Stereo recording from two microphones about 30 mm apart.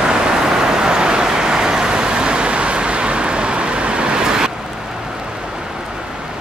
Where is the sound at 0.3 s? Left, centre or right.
Right.